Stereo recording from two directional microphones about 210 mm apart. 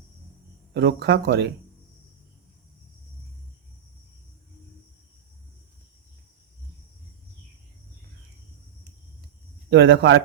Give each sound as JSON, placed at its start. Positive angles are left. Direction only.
{"t": 0.7, "sound": "speech", "side_deg": -50}
{"t": 9.6, "sound": "speech", "side_deg": -55}